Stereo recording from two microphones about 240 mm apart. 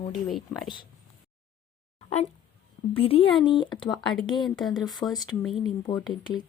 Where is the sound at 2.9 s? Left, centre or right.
Left.